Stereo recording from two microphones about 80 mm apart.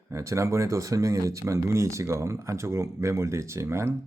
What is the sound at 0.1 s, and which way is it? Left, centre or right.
Speech, right.